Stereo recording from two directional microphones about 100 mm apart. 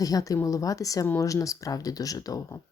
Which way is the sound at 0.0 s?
35° left (ahead or behind).